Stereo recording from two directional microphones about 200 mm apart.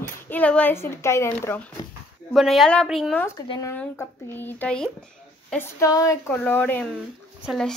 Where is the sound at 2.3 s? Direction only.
Centre (ahead or behind).